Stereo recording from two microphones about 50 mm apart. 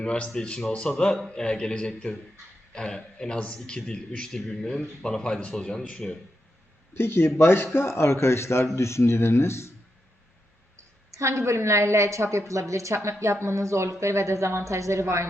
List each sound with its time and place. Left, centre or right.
0.0 s speech: centre
6.9 s a man's voice: left
11.1 s a woman's voice: right